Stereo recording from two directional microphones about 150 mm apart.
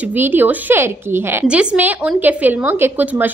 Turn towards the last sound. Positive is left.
turn(degrees=-10)  # may be behind; listen again after turning